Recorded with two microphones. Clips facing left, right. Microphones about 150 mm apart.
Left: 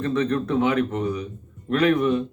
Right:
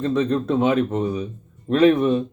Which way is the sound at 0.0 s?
20° right (ahead or behind).